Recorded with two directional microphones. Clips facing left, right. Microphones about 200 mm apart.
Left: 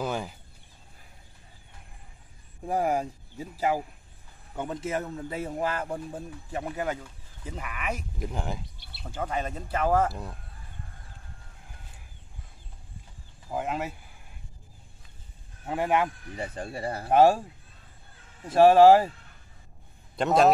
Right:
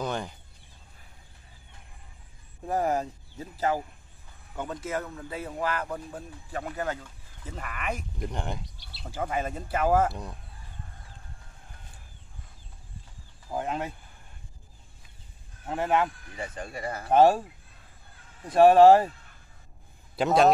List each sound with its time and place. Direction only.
0.0 s a sound: 5° left (ahead or behind)
2.6 s a man's voice: 10° left (ahead or behind)
4.6 s a man's voice: 20° left (ahead or behind); by 10.1 s 5° right (ahead or behind)
13.5 s speech: 5° left (ahead or behind)
15.6 s a man's voice: 10° left (ahead or behind)
16.3 s speech: 30° left (ahead or behind)
17.1 s a man's voice: 10° left (ahead or behind)
18.5 s speech: 5° left (ahead or behind)
20.2 s speech: centre (ahead or behind)